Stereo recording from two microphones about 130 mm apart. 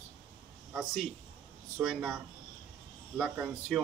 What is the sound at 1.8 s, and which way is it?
Speech, 5° right (ahead or behind).